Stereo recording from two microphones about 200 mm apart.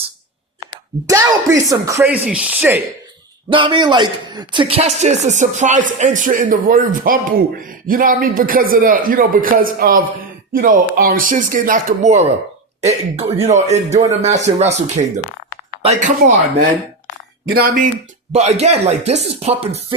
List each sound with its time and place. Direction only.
1.0 s speech: 15° right (ahead or behind)
3.5 s a man's voice: 25° right (ahead or behind)
17.5 s speech: 50° right (ahead or behind)
18.3 s a man's voice: 35° right (ahead or behind)